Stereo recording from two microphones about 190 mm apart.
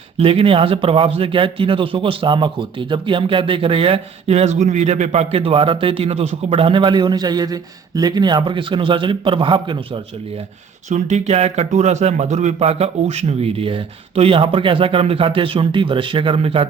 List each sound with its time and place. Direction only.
0.2 s speech: 30° right (ahead or behind)
10.8 s speech: 40° right (ahead or behind)